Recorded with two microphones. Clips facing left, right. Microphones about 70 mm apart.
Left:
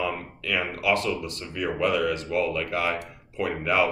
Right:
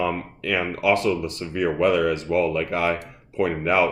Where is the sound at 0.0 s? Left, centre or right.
Right.